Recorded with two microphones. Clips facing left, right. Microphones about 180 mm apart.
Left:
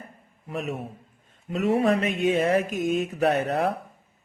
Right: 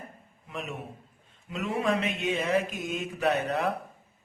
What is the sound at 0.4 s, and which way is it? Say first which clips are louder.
Speech: left 6 dB; 40° left (ahead or behind).